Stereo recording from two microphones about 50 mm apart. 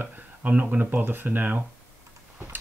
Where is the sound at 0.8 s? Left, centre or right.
Right.